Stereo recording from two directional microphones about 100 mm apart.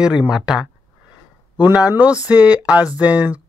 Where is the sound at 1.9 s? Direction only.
15° right (ahead or behind).